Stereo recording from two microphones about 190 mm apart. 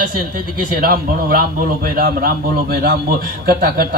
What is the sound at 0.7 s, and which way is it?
A man's voice, 50° right (ahead or behind).